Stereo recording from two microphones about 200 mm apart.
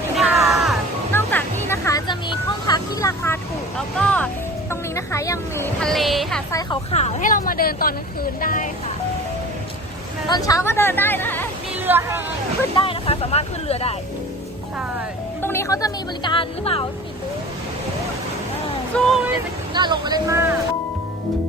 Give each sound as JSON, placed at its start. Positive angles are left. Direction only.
{"t": 0.2, "sound": "music", "side_deg": 0}
{"t": 1.1, "sound": "music", "side_deg": 10}
{"t": 2.6, "sound": "vehicle", "side_deg": 15}
{"t": 3.8, "sound": "music", "side_deg": 5}
{"t": 4.7, "sound": "speech", "side_deg": 15}
{"t": 5.8, "sound": "music", "side_deg": 0}
{"t": 6.5, "sound": "speech", "side_deg": 20}
{"t": 6.9, "sound": "a woman's voice", "side_deg": 35}
{"t": 10.2, "sound": "speech", "side_deg": 20}
{"t": 11.8, "sound": "speech", "side_deg": -10}
{"t": 12.8, "sound": "speech", "side_deg": 30}
{"t": 15.4, "sound": "speech", "side_deg": 10}
{"t": 18.9, "sound": "music", "side_deg": 5}
{"t": 19.7, "sound": "speech", "side_deg": -20}